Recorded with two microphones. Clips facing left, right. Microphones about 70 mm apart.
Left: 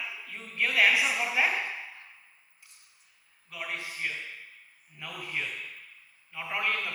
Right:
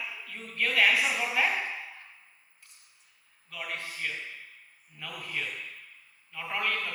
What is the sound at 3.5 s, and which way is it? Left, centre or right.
A man's voice, centre.